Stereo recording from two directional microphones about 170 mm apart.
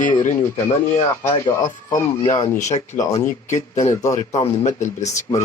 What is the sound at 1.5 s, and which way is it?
Speech, 20° left (ahead or behind).